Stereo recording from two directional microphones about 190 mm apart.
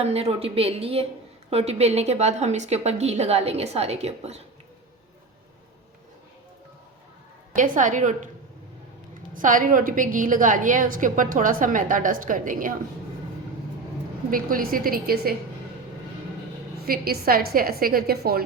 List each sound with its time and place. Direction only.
0.0 s a woman's voice: 35° right (ahead or behind)
7.5 s a woman's voice: 40° right (ahead or behind)
9.3 s a woman's voice: 45° right (ahead or behind)
14.3 s a woman's voice: 50° right (ahead or behind)
16.8 s a woman's voice: 50° right (ahead or behind)